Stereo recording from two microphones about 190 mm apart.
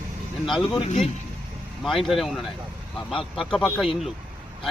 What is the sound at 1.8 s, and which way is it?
Speech, centre (ahead or behind).